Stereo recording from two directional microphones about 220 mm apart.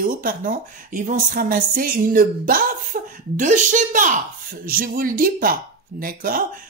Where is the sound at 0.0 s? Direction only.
40° right (ahead or behind).